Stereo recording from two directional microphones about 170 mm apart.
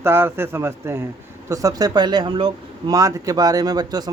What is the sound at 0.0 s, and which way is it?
Speech, 15° right (ahead or behind).